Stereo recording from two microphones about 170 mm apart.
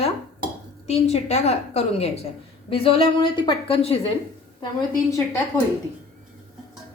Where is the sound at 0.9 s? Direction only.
40° left (ahead or behind).